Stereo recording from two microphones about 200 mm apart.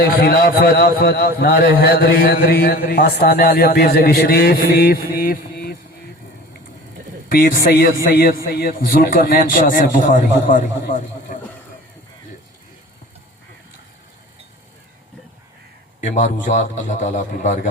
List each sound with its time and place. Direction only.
0.0 s a man's voice: 50° left (ahead or behind)
7.3 s a man's voice: 45° left (ahead or behind)
16.1 s a man's voice: 40° left (ahead or behind)